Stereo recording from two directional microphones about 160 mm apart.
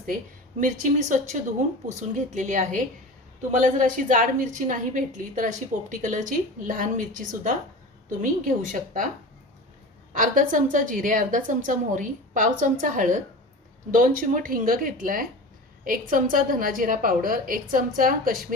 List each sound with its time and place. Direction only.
0.6 s a woman's voice: 50° right (ahead or behind)
10.1 s a woman's voice: 55° right (ahead or behind)